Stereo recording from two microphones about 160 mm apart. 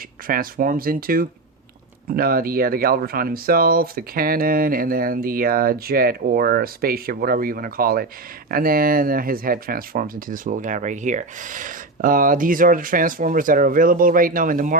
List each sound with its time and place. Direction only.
0.3 s speech: 60° right (ahead or behind)